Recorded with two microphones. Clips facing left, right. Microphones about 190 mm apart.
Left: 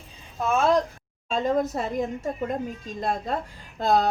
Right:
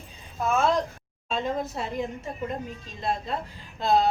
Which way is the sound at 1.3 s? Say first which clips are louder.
Left 5 dB; 45° left (ahead or behind).